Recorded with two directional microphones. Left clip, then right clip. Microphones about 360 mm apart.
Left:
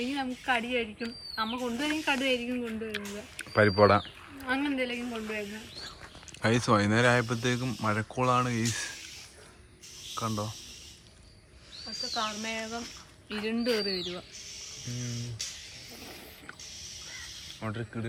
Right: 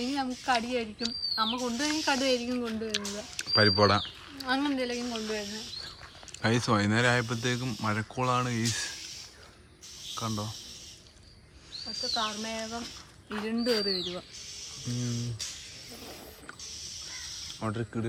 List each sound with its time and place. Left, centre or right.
0.1 s speech: centre
6.4 s speech: centre
10.2 s speech: centre
11.9 s speech: centre
14.9 s speech: centre
17.6 s speech: centre